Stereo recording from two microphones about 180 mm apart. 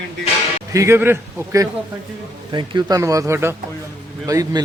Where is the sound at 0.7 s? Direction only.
15° right (ahead or behind).